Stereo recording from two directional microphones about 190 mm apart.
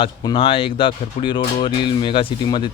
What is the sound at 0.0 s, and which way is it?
Speech, 25° left (ahead or behind).